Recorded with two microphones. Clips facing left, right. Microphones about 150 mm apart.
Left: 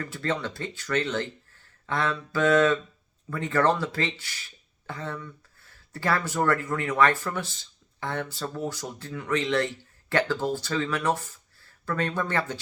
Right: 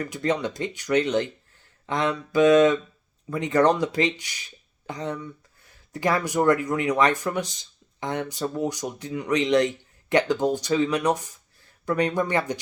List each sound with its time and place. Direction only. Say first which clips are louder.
0.0 s speech: right 4 dB; 15° right (ahead or behind)